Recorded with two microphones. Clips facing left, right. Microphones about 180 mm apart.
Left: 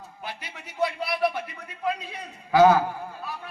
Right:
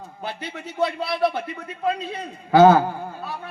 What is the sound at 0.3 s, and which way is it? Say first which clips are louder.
A man's voice: right 8 dB; 25° right (ahead or behind).